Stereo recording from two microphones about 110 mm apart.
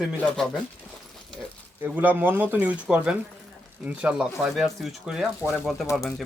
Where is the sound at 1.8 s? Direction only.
15° right (ahead or behind).